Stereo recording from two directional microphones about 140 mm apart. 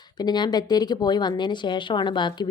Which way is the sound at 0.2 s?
30° left (ahead or behind).